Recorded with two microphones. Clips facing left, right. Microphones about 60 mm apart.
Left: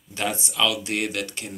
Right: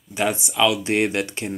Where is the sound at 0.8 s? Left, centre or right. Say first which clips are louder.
Right 6 dB; right.